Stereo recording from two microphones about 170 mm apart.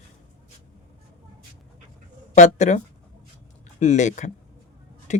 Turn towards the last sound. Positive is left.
turn(degrees=45)  # may be behind; listen again after turning